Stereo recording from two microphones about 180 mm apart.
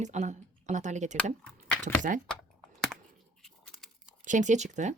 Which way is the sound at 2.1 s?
50° right (ahead or behind).